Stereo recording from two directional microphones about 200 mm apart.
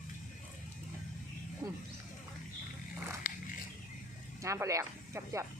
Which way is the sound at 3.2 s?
45° left (ahead or behind).